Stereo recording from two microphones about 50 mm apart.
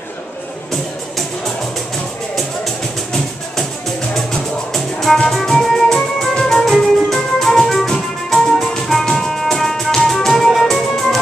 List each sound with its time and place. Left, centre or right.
2.3 s music: centre